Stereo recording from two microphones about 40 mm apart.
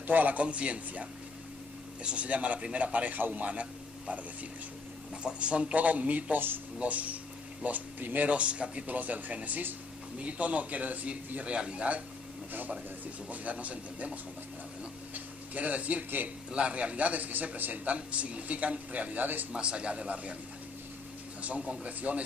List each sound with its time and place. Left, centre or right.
0.0 s speech: right
0.4 s a man's voice: right
2.0 s a man's voice: right
5.2 s a man's voice: right
7.6 s speech: right
8.3 s a man's voice: right
8.9 s speech: right
10.1 s a man's voice: right
13.3 s a man's voice: right
15.1 s a man's voice: right
17.8 s a man's voice: right
19.5 s speech: right
21.4 s a man's voice: right